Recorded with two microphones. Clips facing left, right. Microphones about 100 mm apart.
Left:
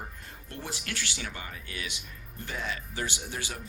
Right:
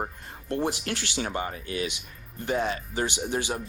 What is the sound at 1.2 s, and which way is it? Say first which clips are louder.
Speech: right 10 dB; 40° right (ahead or behind).